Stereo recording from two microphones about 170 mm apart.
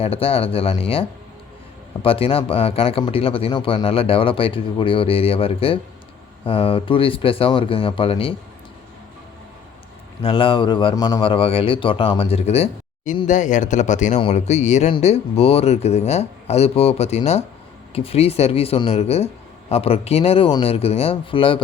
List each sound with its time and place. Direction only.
0.0 s a man's voice: 35° left (ahead or behind)
10.2 s a man's voice: 30° left (ahead or behind)